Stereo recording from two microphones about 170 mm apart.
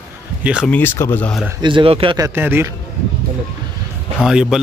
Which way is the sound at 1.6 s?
30° right (ahead or behind).